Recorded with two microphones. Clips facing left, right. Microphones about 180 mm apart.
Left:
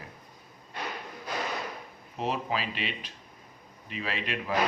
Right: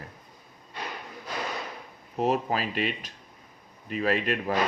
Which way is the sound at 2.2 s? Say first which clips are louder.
Right 5 dB; 45° right (ahead or behind).